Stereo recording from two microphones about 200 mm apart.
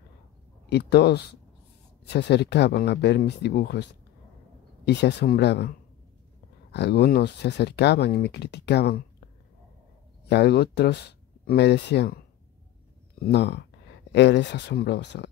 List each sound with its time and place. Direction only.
0.7 s speech: 60° left (ahead or behind)
10.2 s speech: 55° left (ahead or behind)
13.2 s speech: 60° left (ahead or behind)